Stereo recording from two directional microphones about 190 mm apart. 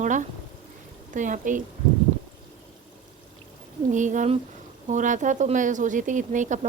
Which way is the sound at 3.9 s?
40° right (ahead or behind).